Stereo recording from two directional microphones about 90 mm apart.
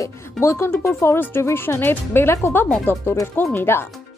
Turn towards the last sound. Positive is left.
turn(degrees=25)  # may be behind; listen again after turning